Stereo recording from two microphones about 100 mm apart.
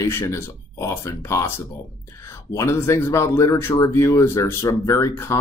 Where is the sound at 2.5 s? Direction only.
30° left (ahead or behind).